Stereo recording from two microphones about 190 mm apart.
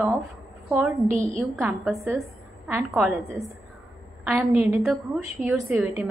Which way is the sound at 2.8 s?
Centre (ahead or behind).